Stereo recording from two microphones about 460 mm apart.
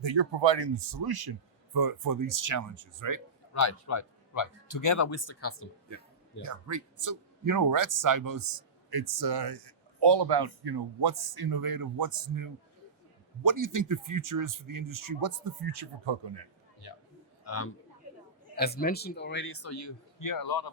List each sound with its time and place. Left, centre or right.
0.0 s speech: right
3.5 s speech: left
6.4 s speech: right
17.4 s a sound: left
18.5 s a man's voice: centre; by 20.7 s left